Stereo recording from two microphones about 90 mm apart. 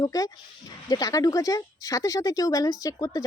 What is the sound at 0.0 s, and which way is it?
Speech, 40° left (ahead or behind).